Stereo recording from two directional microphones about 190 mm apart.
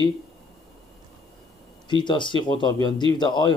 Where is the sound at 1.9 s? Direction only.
25° left (ahead or behind).